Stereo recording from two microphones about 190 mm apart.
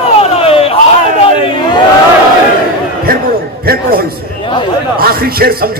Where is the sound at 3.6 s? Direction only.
50° right (ahead or behind).